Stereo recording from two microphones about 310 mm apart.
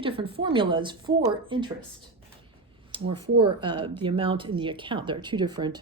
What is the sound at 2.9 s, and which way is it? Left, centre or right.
A woman's voice, centre.